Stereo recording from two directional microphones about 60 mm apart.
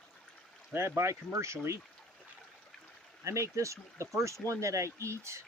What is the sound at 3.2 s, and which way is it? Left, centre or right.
Speech, right.